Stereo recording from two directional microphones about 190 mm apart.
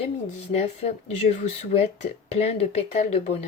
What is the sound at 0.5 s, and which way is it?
Speech, 35° left (ahead or behind).